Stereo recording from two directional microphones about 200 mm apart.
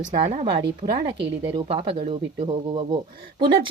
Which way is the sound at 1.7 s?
30° right (ahead or behind).